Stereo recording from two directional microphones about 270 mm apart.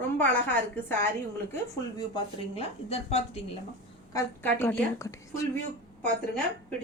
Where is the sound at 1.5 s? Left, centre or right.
Centre.